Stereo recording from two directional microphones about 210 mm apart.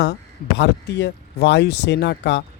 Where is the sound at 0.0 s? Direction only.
55° left (ahead or behind).